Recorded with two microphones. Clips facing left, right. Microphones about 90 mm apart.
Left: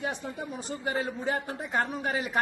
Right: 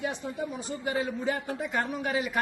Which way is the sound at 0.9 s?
35° left (ahead or behind).